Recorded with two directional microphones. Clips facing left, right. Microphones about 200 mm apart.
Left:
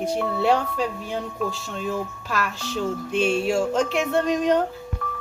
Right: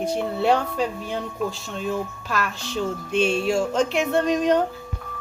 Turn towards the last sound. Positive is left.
turn(degrees=0)  # may be behind; listen again after turning